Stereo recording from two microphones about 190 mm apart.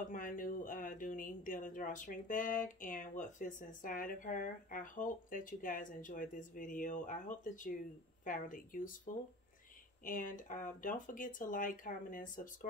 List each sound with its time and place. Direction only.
0.1 s speech: 45° left (ahead or behind)